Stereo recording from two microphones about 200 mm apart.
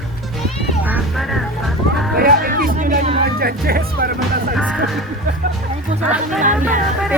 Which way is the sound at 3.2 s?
50° right (ahead or behind).